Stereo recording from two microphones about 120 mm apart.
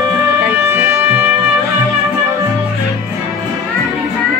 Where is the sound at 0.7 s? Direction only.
20° right (ahead or behind).